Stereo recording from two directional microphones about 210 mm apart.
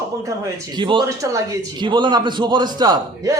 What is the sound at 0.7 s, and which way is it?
A man's voice, 20° right (ahead or behind).